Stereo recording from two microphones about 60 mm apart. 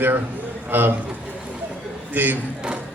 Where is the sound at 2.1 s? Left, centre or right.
Right.